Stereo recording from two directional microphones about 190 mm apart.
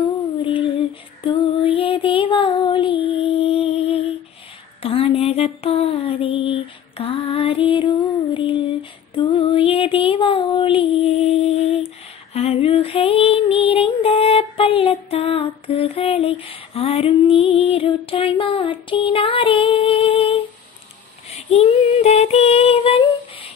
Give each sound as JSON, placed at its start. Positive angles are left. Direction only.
{"t": 0.4, "sound": "female singing", "side_deg": 25}
{"t": 4.8, "sound": "a sound", "side_deg": 30}
{"t": 12.4, "sound": "female singing", "side_deg": 30}
{"t": 21.5, "sound": "female singing", "side_deg": 35}